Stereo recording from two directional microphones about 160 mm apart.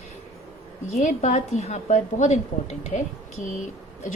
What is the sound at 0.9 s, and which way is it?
A woman's voice, 45° left (ahead or behind).